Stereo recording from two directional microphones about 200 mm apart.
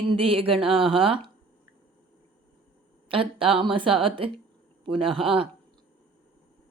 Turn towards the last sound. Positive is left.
turn(degrees=-25)  # may be behind; listen again after turning